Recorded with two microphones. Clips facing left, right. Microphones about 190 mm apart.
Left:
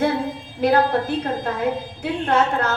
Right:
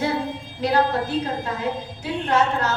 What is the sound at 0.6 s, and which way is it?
A woman's voice, 55° left (ahead or behind).